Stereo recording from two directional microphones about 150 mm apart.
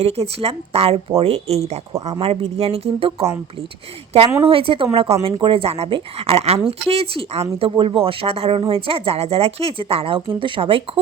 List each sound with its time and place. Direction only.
0.0 s speech: 40° right (ahead or behind)
4.4 s speech: 35° right (ahead or behind)